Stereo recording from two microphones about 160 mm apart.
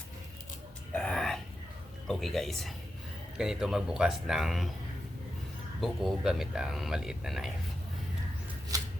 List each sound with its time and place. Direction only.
0.9 s a sound: 5° left (ahead or behind)
2.0 s speech: centre (ahead or behind)
5.8 s speech: centre (ahead or behind)
8.7 s shuffling cards: 20° right (ahead or behind)